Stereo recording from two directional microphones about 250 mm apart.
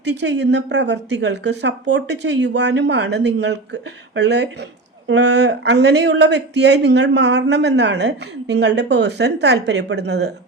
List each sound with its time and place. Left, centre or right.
0.0 s speech: right